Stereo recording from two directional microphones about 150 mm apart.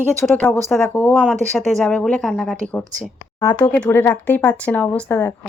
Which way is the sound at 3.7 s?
10° left (ahead or behind).